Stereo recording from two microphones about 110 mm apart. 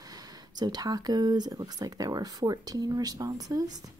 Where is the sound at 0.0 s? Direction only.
35° right (ahead or behind).